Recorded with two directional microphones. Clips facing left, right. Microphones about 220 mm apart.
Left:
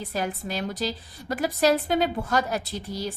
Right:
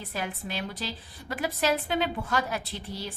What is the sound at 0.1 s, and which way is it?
A woman's voice, 40° left (ahead or behind).